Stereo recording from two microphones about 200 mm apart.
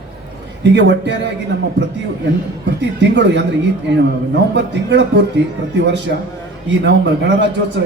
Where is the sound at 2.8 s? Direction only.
60° right (ahead or behind).